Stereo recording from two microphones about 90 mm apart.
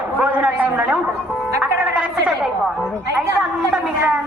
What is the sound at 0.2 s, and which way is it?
Speech, 15° right (ahead or behind).